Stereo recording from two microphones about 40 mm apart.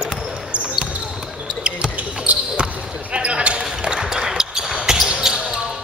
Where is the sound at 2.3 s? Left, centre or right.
Right.